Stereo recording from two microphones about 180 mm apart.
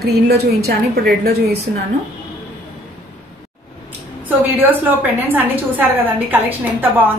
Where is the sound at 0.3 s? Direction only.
60° right (ahead or behind).